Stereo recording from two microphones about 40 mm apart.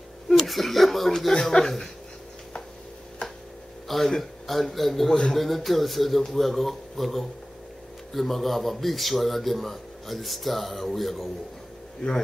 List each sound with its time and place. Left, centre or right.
0.4 s speech: centre
1.3 s speech: centre
3.8 s a sound: centre
4.2 s a man's voice: centre
12.0 s a man's voice: left